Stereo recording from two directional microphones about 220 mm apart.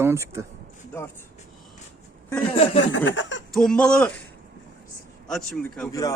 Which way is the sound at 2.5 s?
25° left (ahead or behind).